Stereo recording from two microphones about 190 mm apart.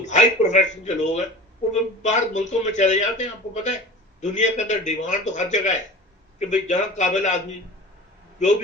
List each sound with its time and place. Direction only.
0.0 s speech: 40° left (ahead or behind)